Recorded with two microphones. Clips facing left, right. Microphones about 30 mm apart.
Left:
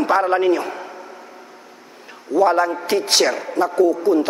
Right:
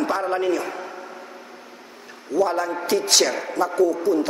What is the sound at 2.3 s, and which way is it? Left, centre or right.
A man's voice, left.